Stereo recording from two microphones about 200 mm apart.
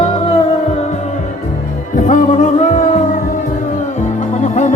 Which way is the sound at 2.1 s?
35° left (ahead or behind).